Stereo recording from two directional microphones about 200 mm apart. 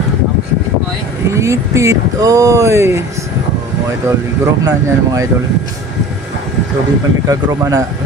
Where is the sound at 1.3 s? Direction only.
15° right (ahead or behind).